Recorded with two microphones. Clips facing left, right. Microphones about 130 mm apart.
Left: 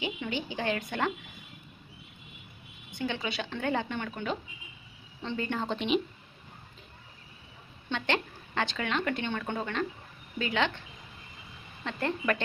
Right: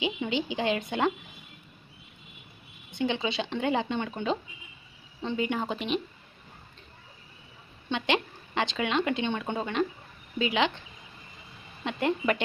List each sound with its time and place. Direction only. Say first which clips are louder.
0.0 s speech: right 4 dB; 20° right (ahead or behind)
2.9 s speech: right 5 dB; 20° right (ahead or behind); by 6.0 s 5° right (ahead or behind)
7.9 s speech: right 3 dB; 15° right (ahead or behind)
11.8 s speech: right 4 dB; 15° right (ahead or behind)